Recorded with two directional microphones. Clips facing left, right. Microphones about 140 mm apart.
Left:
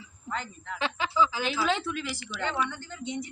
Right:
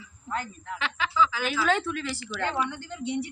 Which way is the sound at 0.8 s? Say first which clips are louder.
Even; 25° left (ahead or behind).